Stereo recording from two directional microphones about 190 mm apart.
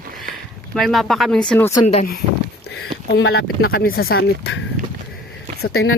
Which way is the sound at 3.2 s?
85° left.